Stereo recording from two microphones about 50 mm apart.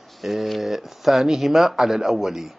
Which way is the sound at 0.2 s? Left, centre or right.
Centre.